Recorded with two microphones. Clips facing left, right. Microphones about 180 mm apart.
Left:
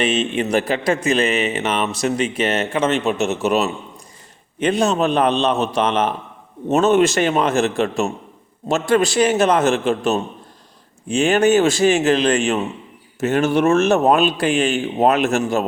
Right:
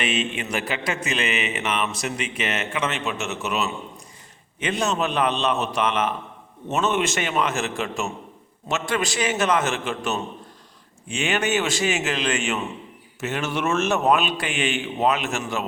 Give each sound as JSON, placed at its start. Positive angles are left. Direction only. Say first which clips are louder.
{"t": 0.0, "sound": "a man's voice", "louder": "left 7 dB", "side_deg": 40}
{"t": 13.1, "sound": "speech", "louder": "left 10 dB", "side_deg": 50}
{"t": 13.7, "sound": "a man's voice", "louder": "left 6 dB", "side_deg": 35}
{"t": 15.0, "sound": "a man's voice", "louder": "left 6 dB", "side_deg": 60}
{"t": 15.3, "sound": "a man's voice", "louder": "left 9 dB", "side_deg": 45}